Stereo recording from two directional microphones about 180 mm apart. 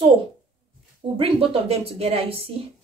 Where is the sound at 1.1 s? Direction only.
30° right (ahead or behind).